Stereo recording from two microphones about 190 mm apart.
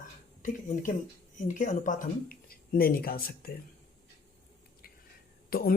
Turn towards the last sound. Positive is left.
turn(degrees=50)  # may be behind; listen again after turning